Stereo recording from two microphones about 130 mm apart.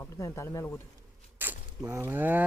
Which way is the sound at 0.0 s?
20° left (ahead or behind).